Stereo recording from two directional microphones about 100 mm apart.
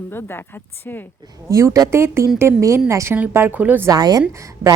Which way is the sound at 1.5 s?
30° right (ahead or behind).